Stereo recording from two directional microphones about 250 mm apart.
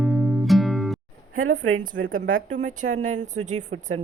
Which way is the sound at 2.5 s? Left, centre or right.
Right.